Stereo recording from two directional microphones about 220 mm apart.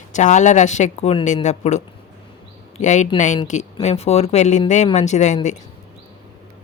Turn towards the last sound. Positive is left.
turn(degrees=30)  # may be behind; listen again after turning